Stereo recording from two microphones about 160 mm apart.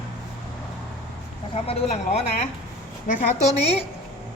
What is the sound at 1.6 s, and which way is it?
Speech, 40° left (ahead or behind).